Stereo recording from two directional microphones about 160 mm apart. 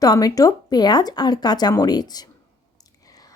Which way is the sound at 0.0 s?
20° left (ahead or behind).